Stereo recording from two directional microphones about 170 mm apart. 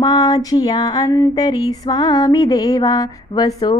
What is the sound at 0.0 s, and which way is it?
Music, 20° left (ahead or behind).